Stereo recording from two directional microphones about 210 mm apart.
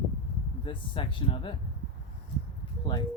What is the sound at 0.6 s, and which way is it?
Speech, 25° left (ahead or behind).